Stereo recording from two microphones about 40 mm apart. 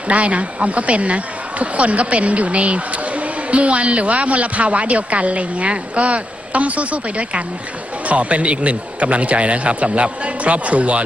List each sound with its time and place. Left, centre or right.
0.1 s speech: right